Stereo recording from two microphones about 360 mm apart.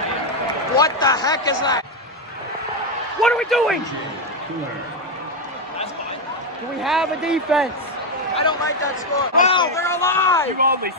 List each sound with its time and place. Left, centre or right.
0.7 s speech: centre
3.2 s a man's voice: centre
6.8 s a man's voice: centre
8.4 s speech: centre
10.6 s speech: right